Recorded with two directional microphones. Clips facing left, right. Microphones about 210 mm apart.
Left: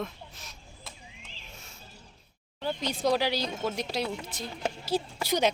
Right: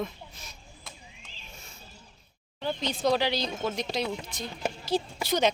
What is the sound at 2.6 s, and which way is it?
Speech, 10° left (ahead or behind).